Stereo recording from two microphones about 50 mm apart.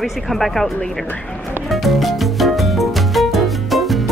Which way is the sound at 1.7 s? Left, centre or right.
Centre.